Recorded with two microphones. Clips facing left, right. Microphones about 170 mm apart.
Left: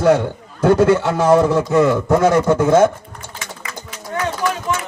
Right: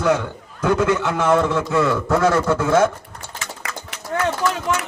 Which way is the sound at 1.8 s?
15° left (ahead or behind).